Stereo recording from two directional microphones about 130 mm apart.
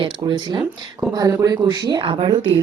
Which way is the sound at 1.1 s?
25° right (ahead or behind).